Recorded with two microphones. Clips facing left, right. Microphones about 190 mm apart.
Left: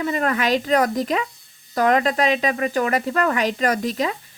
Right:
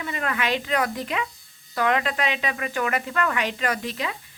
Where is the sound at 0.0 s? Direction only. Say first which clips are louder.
Left 6 dB; 40° left (ahead or behind).